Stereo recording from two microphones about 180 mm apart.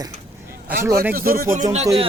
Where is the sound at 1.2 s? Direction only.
50° right (ahead or behind).